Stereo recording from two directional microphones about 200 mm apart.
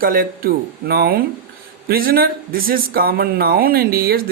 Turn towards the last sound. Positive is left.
turn(degrees=-45)  # may be behind; listen again after turning